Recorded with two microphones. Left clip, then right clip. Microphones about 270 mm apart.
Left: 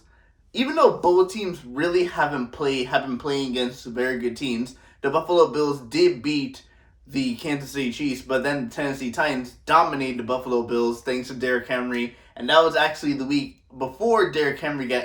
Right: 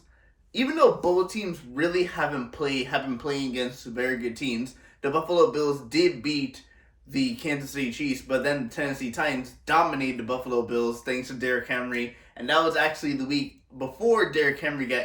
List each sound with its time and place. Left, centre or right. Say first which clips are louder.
0.5 s speech: left 2 dB; centre